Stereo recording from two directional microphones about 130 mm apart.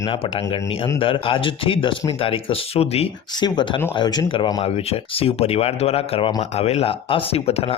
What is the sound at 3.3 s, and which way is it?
Speech, 35° left (ahead or behind).